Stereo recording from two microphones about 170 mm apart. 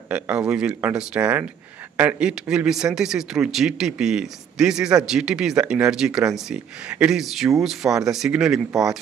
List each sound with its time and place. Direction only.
0.1 s speech: 5° right (ahead or behind)